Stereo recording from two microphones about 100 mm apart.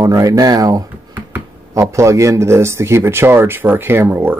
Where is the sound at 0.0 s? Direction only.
35° right (ahead or behind).